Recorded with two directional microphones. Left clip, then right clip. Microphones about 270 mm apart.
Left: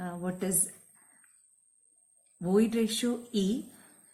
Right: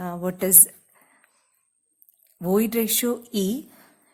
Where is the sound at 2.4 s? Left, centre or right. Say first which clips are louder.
Right 5 dB; right.